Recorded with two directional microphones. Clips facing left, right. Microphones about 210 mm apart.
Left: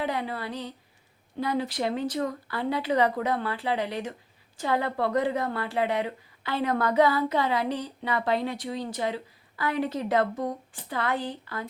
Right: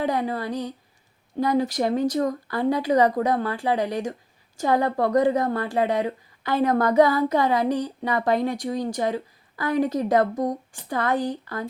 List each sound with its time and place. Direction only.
0.0 s a woman's voice: 45° right (ahead or behind)